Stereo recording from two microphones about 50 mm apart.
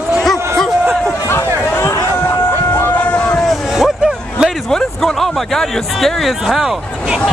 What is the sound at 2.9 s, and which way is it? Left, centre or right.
Vehicle, left.